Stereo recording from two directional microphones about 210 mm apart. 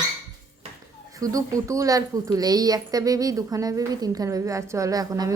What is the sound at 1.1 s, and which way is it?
A woman's voice, 15° right (ahead or behind).